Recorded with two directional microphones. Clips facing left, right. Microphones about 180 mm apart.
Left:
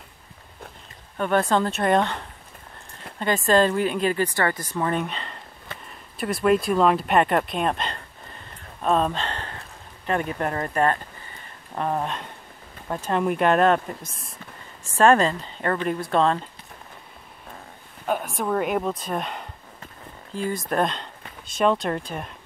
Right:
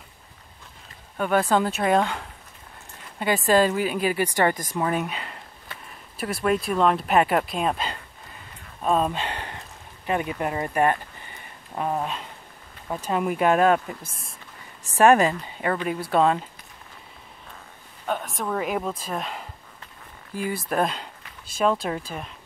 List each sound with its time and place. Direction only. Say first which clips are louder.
1.1 s speech: even; 5° right (ahead or behind)
8.8 s a sound: left 1 dB; 5° right (ahead or behind)
10.0 s speech: left 1 dB; 10° right (ahead or behind)
15.0 s speech: right 1 dB; 10° right (ahead or behind)
18.0 s speech: left 3 dB; 5° left (ahead or behind)